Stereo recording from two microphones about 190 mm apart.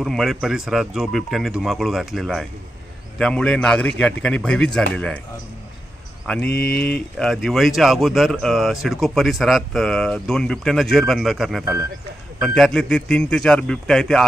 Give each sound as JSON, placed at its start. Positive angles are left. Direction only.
{"t": 0.0, "sound": "speech", "side_deg": 0}
{"t": 6.2, "sound": "speech", "side_deg": 5}
{"t": 6.5, "sound": "speech", "side_deg": 55}
{"t": 6.8, "sound": "speech", "side_deg": 5}